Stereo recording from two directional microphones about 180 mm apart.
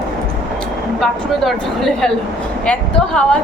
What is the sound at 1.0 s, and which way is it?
A woman's voice, centre (ahead or behind).